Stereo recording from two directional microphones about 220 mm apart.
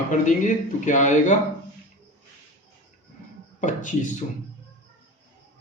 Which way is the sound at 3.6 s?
35° left (ahead or behind).